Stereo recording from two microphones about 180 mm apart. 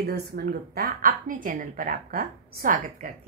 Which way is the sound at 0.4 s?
60° right (ahead or behind).